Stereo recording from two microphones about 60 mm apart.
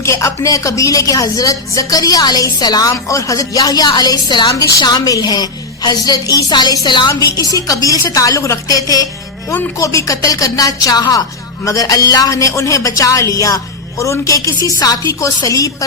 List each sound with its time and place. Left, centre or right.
0.0 s a woman's voice: left
8.1 s a woman's voice: left
9.7 s a woman's voice: left